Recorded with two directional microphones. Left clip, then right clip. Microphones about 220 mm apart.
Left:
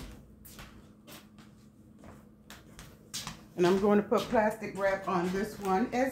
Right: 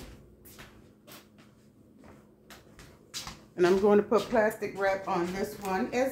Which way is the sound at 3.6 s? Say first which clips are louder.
Right 3 dB; 10° right (ahead or behind).